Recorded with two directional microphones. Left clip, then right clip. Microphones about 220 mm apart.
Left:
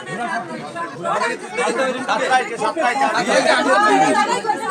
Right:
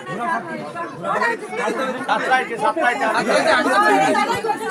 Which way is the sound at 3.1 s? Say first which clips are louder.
Left 1 dB; 10° left (ahead or behind).